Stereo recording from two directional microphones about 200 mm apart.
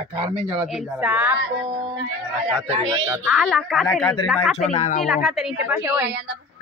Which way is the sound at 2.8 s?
20° right (ahead or behind).